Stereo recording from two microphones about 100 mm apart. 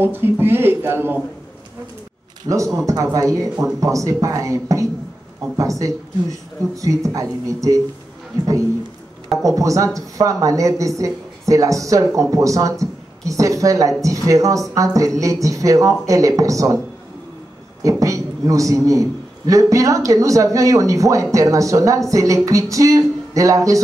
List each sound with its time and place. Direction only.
0.0 s speech: 20° right (ahead or behind)
2.4 s a woman's voice: 30° right (ahead or behind)
9.4 s a woman's voice: 35° right (ahead or behind)
17.8 s a woman's voice: 35° right (ahead or behind)